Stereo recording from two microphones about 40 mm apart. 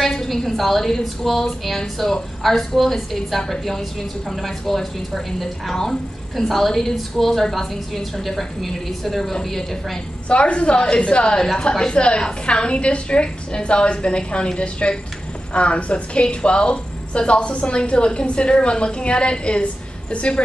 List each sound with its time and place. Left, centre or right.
0.0 s a woman's voice: centre
10.2 s a woman's voice: left